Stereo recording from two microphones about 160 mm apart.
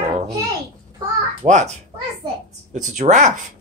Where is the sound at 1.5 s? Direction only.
50° right (ahead or behind).